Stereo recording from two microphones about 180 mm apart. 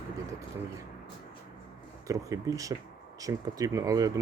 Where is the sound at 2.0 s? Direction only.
20° right (ahead or behind).